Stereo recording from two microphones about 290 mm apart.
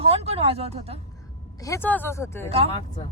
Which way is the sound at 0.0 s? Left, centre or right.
Centre.